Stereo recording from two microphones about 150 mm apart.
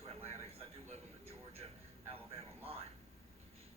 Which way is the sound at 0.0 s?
45° right (ahead or behind).